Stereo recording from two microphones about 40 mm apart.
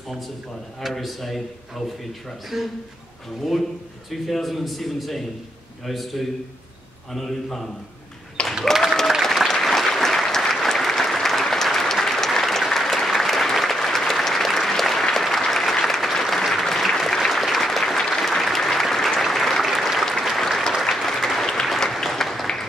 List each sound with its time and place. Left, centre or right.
0.9 s a man's voice: centre
2.5 s a man's voice: centre
4.1 s a man's voice: centre
8.4 s applause: left
8.8 s applause: centre